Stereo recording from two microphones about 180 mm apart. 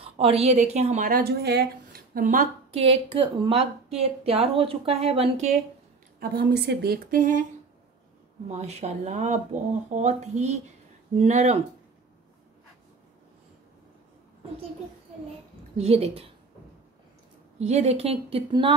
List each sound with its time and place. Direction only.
0.0 s a woman's voice: 35° right (ahead or behind)
1.1 s a woman's voice: 60° right (ahead or behind); by 5.6 s 35° right (ahead or behind)
6.1 s speech: 60° right (ahead or behind)
8.5 s a woman's voice: 40° right (ahead or behind)
15.8 s a woman's voice: 35° right (ahead or behind)
17.6 s a woman's voice: 35° right (ahead or behind)